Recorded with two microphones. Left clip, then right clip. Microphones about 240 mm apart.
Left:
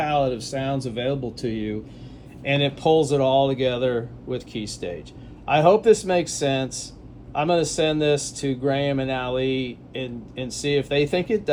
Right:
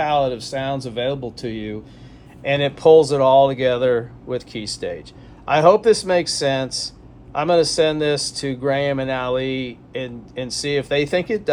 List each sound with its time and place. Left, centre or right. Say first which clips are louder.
0.0 s speech: right 3 dB; centre
2.4 s speech: right 3 dB; right
2.8 s speech: right 8 dB; right